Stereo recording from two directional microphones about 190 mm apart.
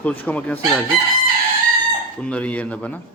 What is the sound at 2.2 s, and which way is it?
Cutlery, 5° left (ahead or behind).